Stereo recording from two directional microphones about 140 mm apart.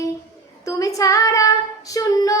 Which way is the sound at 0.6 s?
25° left (ahead or behind).